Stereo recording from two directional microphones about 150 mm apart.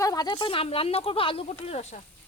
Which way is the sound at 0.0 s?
25° left (ahead or behind).